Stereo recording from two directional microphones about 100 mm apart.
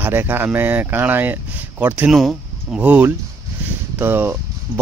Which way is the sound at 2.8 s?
15° right (ahead or behind).